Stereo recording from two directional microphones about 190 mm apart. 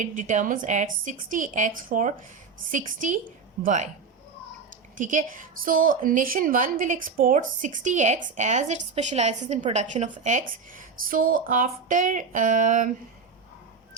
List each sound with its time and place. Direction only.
0.0 s a woman's voice: 40° right (ahead or behind)
4.9 s a woman's voice: 40° right (ahead or behind)